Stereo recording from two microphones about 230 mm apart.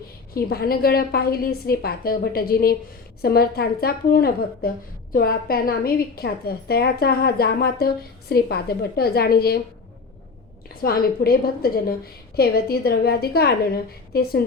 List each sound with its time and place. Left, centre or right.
0.3 s a woman's voice: left
10.8 s a woman's voice: left